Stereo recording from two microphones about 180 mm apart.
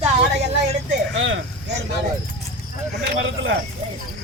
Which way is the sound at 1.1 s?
90° right.